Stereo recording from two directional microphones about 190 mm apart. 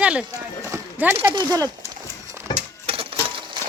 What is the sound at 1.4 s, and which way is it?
Horse, 20° right (ahead or behind).